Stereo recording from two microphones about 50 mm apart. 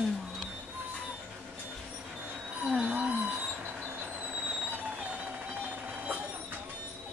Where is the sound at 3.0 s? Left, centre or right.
Right.